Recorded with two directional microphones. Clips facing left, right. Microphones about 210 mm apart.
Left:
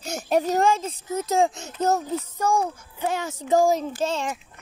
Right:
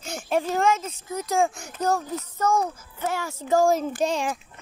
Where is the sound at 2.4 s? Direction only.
10° left (ahead or behind).